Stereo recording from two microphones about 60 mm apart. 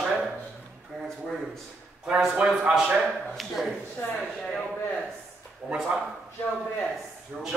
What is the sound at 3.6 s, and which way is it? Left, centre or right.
Speech, centre.